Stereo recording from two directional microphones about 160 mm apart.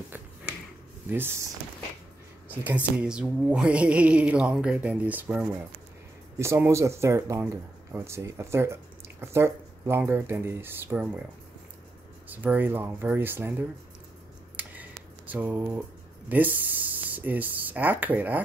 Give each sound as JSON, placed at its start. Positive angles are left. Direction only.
{"t": 1.1, "sound": "speech", "side_deg": -15}
{"t": 2.5, "sound": "speech", "side_deg": -10}
{"t": 12.3, "sound": "speech", "side_deg": -10}
{"t": 14.6, "sound": "finger snapping", "side_deg": -10}
{"t": 16.3, "sound": "speech", "side_deg": -10}